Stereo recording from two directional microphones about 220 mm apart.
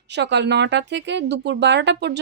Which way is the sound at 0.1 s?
50° right (ahead or behind).